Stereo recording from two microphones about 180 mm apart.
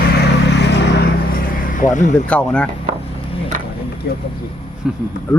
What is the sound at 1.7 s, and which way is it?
Speech, 45° left (ahead or behind).